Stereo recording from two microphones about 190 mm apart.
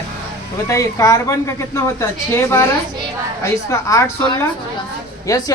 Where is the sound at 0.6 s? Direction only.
15° left (ahead or behind).